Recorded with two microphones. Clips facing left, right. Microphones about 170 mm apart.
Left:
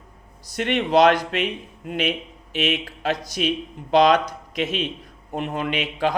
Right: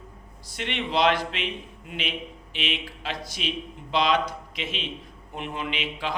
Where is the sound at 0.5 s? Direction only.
45° left (ahead or behind).